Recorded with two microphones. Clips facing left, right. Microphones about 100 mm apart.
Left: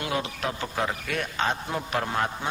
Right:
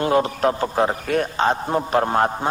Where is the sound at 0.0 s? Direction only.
40° right (ahead or behind).